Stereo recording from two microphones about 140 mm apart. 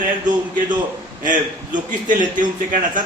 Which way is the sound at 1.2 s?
70° right (ahead or behind).